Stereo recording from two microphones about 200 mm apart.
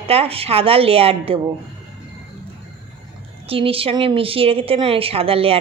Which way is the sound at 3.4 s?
30° right (ahead or behind).